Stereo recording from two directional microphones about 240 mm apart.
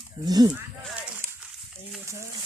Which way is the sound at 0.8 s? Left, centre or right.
Centre.